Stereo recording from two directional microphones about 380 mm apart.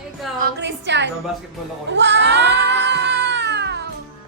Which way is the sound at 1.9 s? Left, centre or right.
Right.